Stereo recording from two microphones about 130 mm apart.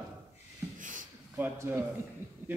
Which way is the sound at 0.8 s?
85° right.